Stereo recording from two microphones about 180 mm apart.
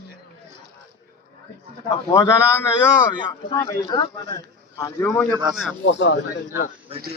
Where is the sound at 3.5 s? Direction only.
15° left (ahead or behind).